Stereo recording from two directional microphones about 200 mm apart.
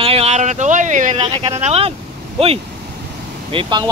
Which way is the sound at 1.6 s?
30° right (ahead or behind).